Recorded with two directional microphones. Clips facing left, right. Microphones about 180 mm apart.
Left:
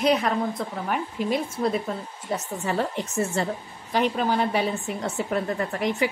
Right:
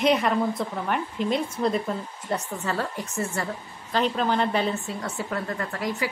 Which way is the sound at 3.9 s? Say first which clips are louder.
Left 1 dB; 10° left (ahead or behind).